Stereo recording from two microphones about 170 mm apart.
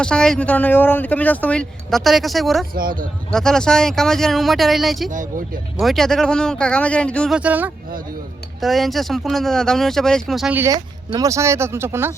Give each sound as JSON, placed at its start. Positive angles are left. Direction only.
{"t": 0.0, "sound": "speech", "side_deg": 5}
{"t": 2.7, "sound": "speech", "side_deg": -55}
{"t": 3.3, "sound": "speech", "side_deg": 5}
{"t": 7.3, "sound": "speech", "side_deg": -10}
{"t": 10.6, "sound": "speech", "side_deg": -20}